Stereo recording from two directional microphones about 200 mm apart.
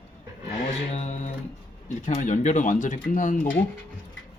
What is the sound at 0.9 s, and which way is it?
Speech, 35° left (ahead or behind).